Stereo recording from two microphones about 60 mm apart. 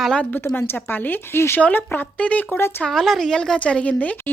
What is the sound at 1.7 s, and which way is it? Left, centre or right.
Speech, left.